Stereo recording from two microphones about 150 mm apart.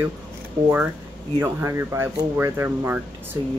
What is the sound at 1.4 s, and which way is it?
Speech, 15° right (ahead or behind).